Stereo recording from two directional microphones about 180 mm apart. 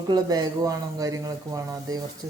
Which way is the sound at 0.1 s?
20° right (ahead or behind).